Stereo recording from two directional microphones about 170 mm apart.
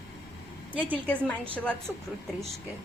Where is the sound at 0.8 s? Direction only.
5° left (ahead or behind).